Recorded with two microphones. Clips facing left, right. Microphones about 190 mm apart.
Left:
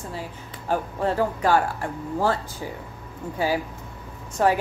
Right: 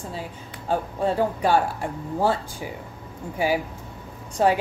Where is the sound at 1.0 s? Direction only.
20° right (ahead or behind).